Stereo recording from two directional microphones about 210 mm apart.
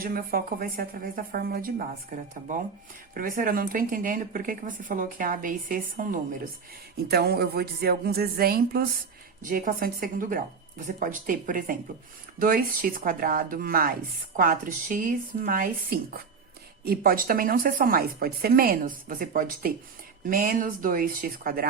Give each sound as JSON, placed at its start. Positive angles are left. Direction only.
{"t": 0.0, "sound": "speech", "side_deg": -45}